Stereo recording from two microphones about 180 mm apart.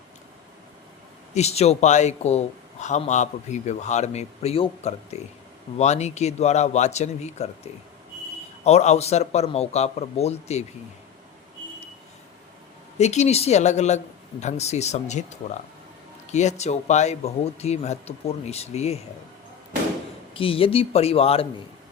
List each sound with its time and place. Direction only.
1.3 s speech: 35° left (ahead or behind)
13.0 s speech: 40° left (ahead or behind)
16.3 s speech: 40° left (ahead or behind)
20.3 s speech: 30° left (ahead or behind)